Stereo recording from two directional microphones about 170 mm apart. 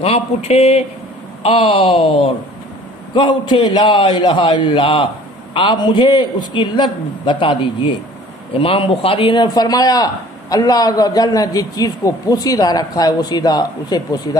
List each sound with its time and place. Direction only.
0.0 s a man's voice: 35° left (ahead or behind)